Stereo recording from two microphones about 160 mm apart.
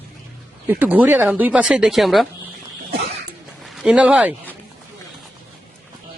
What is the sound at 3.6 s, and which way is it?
Speech, centre (ahead or behind).